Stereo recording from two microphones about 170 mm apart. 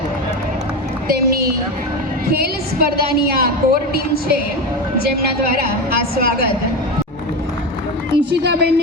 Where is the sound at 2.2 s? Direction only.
65° right (ahead or behind).